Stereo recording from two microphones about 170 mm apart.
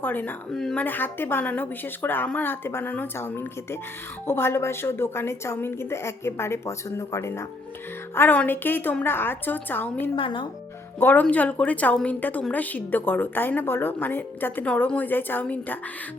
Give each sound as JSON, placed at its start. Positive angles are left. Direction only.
{"t": 0.0, "sound": "a woman's voice", "side_deg": 10}
{"t": 10.2, "sound": "speech", "side_deg": 30}
{"t": 11.0, "sound": "a woman's voice", "side_deg": 10}